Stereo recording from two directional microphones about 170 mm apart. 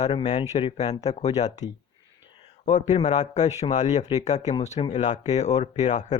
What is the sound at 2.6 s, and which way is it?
Speech, 45° left (ahead or behind).